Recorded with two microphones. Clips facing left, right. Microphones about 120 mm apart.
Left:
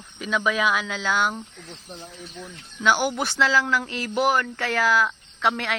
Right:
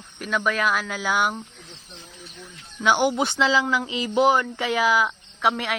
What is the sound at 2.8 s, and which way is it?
Speech, 20° right (ahead or behind).